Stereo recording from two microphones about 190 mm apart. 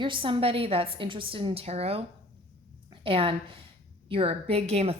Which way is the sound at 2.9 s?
30° right (ahead or behind).